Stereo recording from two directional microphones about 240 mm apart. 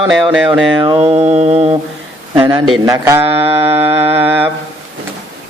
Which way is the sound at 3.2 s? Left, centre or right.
Right.